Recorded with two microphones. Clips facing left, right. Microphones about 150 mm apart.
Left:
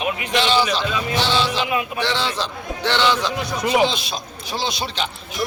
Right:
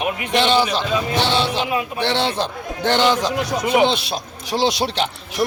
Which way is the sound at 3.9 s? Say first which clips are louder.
Right 5 dB; 65° right (ahead or behind).